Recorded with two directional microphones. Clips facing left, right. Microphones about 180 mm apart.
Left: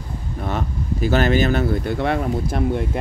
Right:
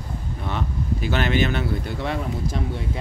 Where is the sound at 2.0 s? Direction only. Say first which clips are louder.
Left 6 dB; 60° left (ahead or behind).